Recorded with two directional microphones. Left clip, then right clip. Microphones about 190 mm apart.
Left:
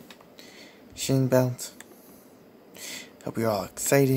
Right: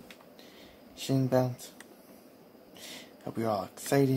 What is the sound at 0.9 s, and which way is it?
Speech, 30° left (ahead or behind).